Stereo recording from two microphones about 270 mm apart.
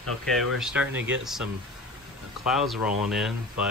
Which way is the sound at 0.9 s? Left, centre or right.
Right.